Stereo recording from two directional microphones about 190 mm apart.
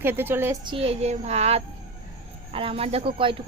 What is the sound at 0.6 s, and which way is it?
A woman's voice, 30° right (ahead or behind).